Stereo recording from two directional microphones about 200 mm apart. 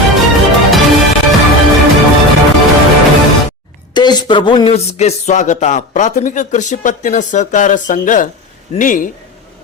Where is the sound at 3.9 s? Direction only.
20° left (ahead or behind).